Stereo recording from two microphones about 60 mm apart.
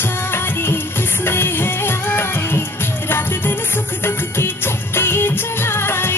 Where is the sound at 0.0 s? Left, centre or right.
Left.